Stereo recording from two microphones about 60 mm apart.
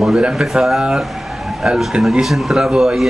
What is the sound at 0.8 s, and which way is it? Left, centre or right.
A man's voice, centre.